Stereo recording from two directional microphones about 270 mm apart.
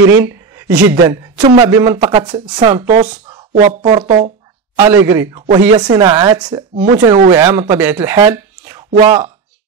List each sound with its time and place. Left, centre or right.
0.1 s a sound: centre
1.0 s speech: centre
2.9 s speech: right
4.7 s speech: centre